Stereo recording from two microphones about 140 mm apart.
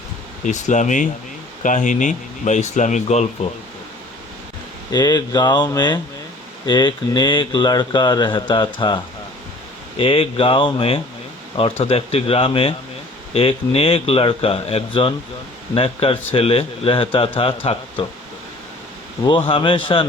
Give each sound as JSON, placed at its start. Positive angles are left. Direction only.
{"t": 0.4, "sound": "speech", "side_deg": 60}
{"t": 4.9, "sound": "a man's voice", "side_deg": 30}
{"t": 10.0, "sound": "a man's voice", "side_deg": 45}
{"t": 19.2, "sound": "a man's voice", "side_deg": 40}